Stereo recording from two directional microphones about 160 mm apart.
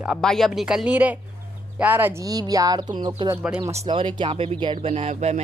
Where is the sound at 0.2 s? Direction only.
Centre (ahead or behind).